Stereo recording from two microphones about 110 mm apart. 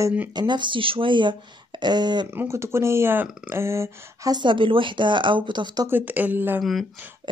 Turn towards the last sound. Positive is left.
turn(degrees=0)  # may be behind; listen again after turning